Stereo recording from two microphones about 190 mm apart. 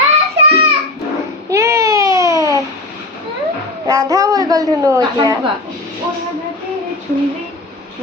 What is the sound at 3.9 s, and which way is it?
A woman's voice, 15° right (ahead or behind).